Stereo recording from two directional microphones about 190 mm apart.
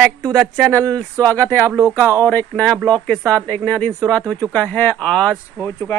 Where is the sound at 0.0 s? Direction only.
5° left (ahead or behind).